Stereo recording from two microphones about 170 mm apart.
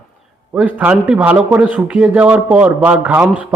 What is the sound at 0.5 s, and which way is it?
A man's voice, 10° right (ahead or behind).